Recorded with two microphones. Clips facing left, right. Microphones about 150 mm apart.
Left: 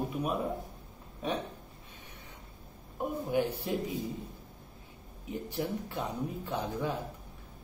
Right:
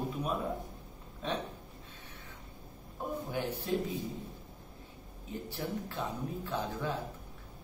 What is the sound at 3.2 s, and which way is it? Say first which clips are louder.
Speech: left 5 dB; 10° left (ahead or behind).